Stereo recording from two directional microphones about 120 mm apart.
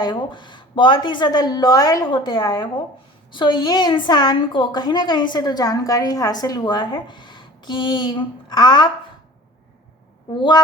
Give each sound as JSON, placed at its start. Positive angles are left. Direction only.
{"t": 0.0, "sound": "a woman's voice", "side_deg": 40}